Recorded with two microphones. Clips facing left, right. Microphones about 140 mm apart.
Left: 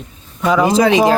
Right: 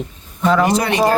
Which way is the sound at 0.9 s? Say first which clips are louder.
Left 4 dB; 90° left.